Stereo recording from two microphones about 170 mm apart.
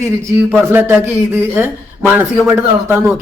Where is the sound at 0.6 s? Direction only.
15° right (ahead or behind).